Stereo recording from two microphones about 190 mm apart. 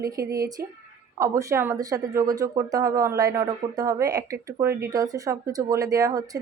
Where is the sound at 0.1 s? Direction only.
20° right (ahead or behind).